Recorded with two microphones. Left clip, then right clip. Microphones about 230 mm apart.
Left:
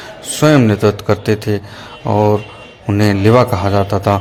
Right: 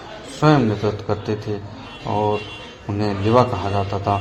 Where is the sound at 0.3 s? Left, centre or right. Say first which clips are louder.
Left 6 dB; left.